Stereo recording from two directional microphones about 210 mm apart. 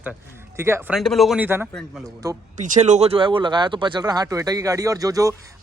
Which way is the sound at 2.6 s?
35° right (ahead or behind).